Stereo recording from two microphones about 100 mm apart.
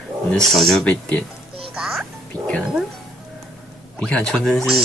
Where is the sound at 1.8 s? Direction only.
5° right (ahead or behind).